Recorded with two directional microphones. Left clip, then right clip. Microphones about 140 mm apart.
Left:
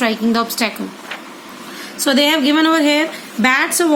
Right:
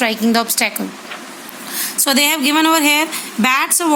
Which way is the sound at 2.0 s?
20° right (ahead or behind).